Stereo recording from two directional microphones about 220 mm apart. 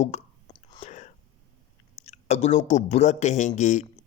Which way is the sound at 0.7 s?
30° left (ahead or behind).